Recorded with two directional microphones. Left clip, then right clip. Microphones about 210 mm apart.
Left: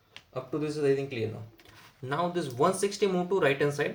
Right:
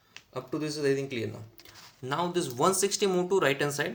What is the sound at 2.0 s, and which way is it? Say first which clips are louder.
Speech: even; 40° right (ahead or behind).